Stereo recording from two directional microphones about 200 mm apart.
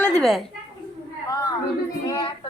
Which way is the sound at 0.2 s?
Centre (ahead or behind).